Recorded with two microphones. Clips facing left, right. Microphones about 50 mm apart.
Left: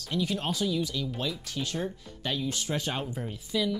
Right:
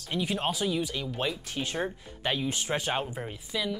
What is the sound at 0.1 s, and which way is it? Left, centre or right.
Speech, right.